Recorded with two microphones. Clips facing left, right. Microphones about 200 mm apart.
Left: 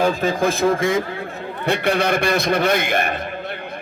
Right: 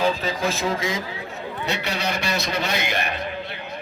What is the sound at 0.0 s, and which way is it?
A man's voice, 50° left (ahead or behind).